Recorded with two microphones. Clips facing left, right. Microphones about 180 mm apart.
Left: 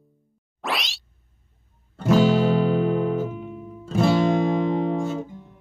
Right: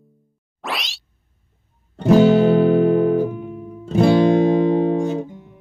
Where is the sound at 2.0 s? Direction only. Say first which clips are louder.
Right 6 dB; 20° right (ahead or behind).